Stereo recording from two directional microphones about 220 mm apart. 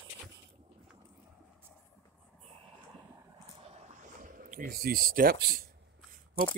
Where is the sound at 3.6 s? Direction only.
30° right (ahead or behind).